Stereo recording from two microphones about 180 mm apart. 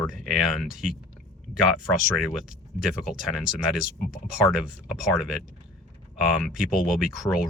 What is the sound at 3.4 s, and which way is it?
Speech, 5° right (ahead or behind).